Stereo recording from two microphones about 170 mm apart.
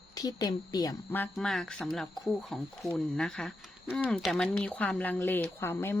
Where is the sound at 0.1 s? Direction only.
20° left (ahead or behind).